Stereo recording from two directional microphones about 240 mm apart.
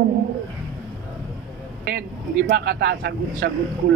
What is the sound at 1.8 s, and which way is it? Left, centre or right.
A woman's voice, right.